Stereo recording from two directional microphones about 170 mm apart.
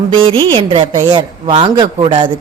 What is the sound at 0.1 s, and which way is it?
A woman's voice, 30° right (ahead or behind).